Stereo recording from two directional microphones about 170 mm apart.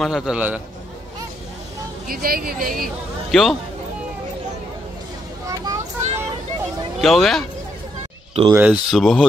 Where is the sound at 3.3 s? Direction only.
Centre (ahead or behind).